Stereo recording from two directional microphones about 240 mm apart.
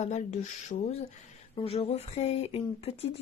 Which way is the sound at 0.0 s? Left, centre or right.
Left.